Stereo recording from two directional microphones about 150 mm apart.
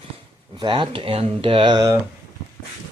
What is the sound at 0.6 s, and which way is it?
Speech, 35° right (ahead or behind).